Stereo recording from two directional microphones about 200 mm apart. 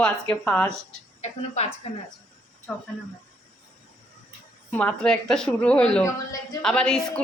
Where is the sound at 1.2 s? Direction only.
30° left (ahead or behind).